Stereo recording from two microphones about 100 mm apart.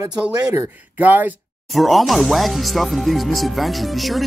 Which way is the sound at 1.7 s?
Centre (ahead or behind).